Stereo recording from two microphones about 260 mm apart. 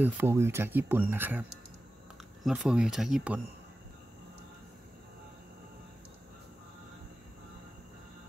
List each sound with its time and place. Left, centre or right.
0.0 s speech: centre
2.4 s speech: centre